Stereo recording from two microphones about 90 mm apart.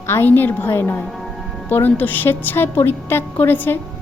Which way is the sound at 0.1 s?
25° left (ahead or behind).